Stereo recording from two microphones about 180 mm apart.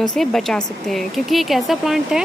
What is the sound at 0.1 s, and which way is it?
Speech, centre (ahead or behind).